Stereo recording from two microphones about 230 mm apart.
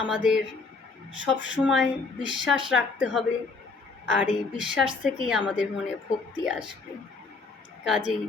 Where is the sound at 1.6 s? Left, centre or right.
Centre.